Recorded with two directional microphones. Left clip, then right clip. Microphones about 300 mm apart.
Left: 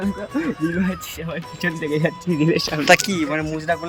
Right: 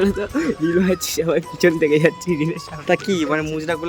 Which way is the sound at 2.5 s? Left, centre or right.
Centre.